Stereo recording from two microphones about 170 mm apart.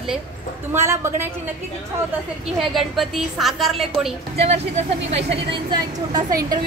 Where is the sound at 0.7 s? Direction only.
15° right (ahead or behind).